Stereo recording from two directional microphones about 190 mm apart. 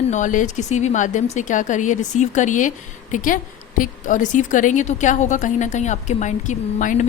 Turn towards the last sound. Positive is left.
turn(degrees=40)  # may be behind; listen again after turning